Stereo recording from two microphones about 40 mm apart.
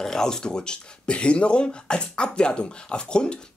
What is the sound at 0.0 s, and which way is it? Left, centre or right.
Speech, centre.